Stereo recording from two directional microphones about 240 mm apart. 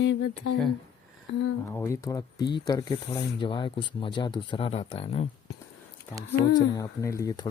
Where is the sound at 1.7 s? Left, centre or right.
Centre.